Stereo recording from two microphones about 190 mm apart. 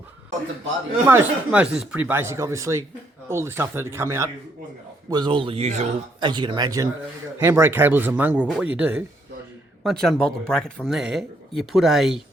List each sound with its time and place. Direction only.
1.0 s speech: 10° right (ahead or behind); by 5.9 s 35° right (ahead or behind)
6.1 s speech: 25° right (ahead or behind); by 12.2 s centre (ahead or behind)